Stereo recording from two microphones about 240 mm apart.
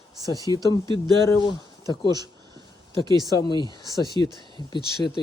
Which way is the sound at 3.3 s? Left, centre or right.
Centre.